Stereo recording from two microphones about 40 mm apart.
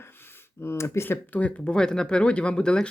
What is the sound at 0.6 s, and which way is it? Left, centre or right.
Speech, left.